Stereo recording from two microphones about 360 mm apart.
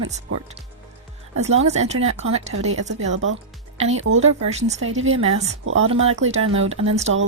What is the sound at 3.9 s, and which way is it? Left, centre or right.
Speech, right.